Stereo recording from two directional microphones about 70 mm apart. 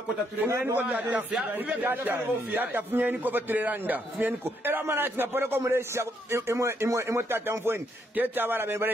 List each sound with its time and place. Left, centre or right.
0.5 s a man's voice: right
0.7 s a man's voice: right
1.8 s a man's voice: right